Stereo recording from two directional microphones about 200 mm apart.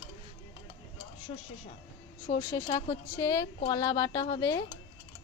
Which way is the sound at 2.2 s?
20° left (ahead or behind).